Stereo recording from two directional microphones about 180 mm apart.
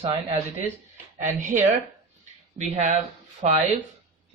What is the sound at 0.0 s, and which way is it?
Speech, 35° right (ahead or behind).